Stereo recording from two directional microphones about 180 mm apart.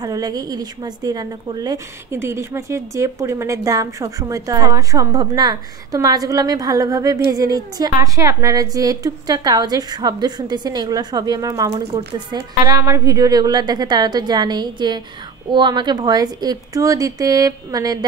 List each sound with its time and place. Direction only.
0.0 s a woman's voice: 20° right (ahead or behind)